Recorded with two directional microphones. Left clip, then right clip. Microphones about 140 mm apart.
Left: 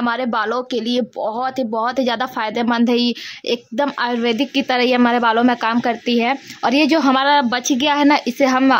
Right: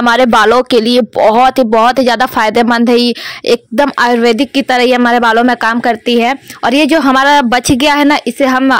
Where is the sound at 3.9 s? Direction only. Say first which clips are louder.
Right 11 dB; 55° right (ahead or behind).